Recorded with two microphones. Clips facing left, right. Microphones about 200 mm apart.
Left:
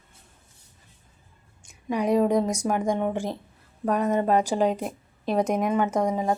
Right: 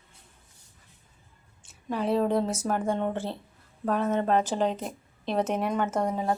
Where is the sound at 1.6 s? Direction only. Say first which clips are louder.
Left 4 dB; 15° left (ahead or behind).